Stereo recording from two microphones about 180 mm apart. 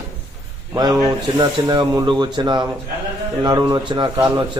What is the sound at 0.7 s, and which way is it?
A man's voice, 20° right (ahead or behind).